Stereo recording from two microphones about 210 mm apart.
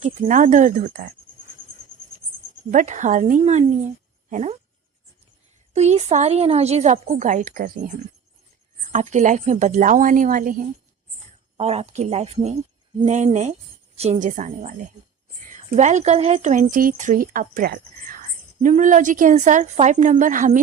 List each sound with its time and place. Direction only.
0.0 s a woman's voice: 35° right (ahead or behind)
2.6 s a woman's voice: 35° right (ahead or behind)
5.7 s a woman's voice: 30° right (ahead or behind)
8.9 s a woman's voice: 35° right (ahead or behind)
11.5 s a woman's voice: 30° right (ahead or behind)